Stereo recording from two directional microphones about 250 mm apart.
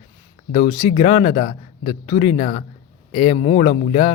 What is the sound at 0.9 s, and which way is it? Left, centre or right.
Speech, left.